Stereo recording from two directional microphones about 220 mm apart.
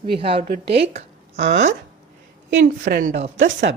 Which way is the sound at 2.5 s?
50° right (ahead or behind).